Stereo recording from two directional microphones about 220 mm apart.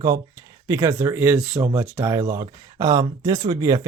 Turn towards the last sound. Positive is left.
turn(degrees=-15)  # may be behind; listen again after turning